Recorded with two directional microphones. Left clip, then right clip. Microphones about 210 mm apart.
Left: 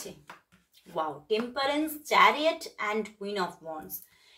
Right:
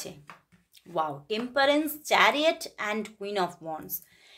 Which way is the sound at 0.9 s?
55° right (ahead or behind).